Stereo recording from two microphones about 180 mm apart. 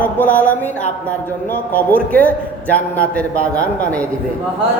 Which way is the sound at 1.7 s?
10° left (ahead or behind).